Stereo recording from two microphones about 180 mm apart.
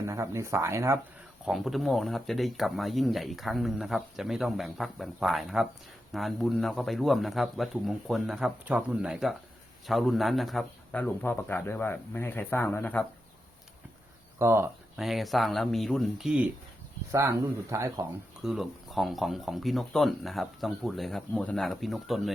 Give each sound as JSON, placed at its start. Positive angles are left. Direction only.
{"t": 0.0, "sound": "speech", "side_deg": -15}
{"t": 1.5, "sound": "a man's voice", "side_deg": 0}
{"t": 14.3, "sound": "speech", "side_deg": -15}
{"t": 14.9, "sound": "speech", "side_deg": 0}
{"t": 17.1, "sound": "speech", "side_deg": -15}
{"t": 18.4, "sound": "speech", "side_deg": 0}